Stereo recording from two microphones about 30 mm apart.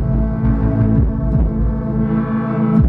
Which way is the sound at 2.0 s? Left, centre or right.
Centre.